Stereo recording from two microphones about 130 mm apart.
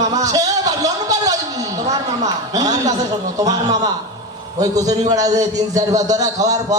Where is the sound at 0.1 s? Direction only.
30° right (ahead or behind).